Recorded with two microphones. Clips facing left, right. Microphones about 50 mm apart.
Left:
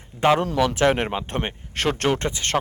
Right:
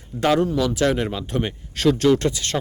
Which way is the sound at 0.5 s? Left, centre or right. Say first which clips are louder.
Left 1 dB; left.